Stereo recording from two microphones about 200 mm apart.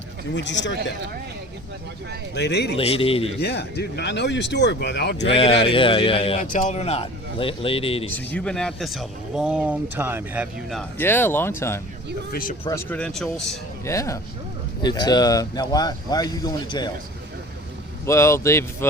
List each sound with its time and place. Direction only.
0.3 s speech: 65° left (ahead or behind)
2.3 s speech: 55° left (ahead or behind)
2.7 s a man's voice: 30° left (ahead or behind)
3.4 s speech: 55° left (ahead or behind)
5.3 s a man's voice: 30° left (ahead or behind)
8.3 s speech: 5° left (ahead or behind)
12.3 s speech: 45° left (ahead or behind)
12.9 s speech: 5° left (ahead or behind)
13.8 s a man's voice: 15° left (ahead or behind)
18.0 s speech: 15° left (ahead or behind)